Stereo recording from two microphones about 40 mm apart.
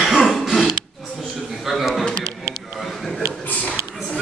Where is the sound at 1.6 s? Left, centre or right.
Centre.